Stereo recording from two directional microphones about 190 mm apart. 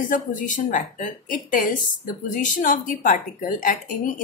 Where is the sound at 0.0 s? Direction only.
45° left (ahead or behind).